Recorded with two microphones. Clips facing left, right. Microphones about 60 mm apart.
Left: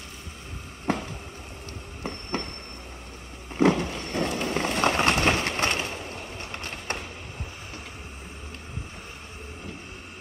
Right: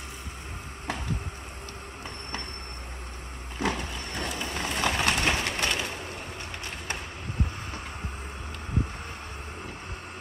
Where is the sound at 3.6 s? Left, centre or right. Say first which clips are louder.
Left 8 dB; left.